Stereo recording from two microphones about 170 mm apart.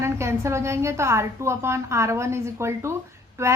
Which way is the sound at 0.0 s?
15° right (ahead or behind).